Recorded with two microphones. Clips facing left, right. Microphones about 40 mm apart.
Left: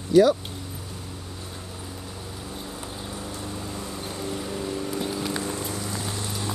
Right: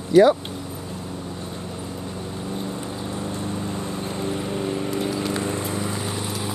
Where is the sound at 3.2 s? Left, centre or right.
Right.